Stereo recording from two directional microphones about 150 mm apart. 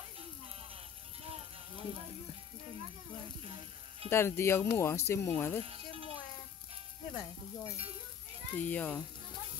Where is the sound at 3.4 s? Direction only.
40° right (ahead or behind).